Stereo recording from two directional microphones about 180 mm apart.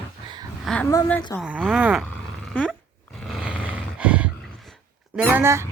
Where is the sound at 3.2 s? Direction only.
Centre (ahead or behind).